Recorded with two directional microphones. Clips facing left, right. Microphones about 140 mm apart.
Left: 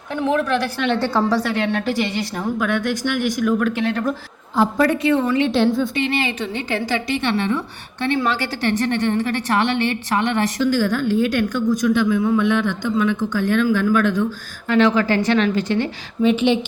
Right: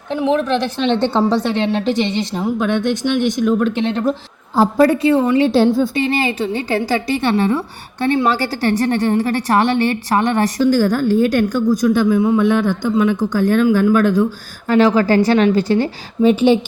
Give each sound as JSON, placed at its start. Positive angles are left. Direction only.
{"t": 0.2, "sound": "a woman's voice", "side_deg": -20}
{"t": 12.4, "sound": "a woman's voice", "side_deg": -40}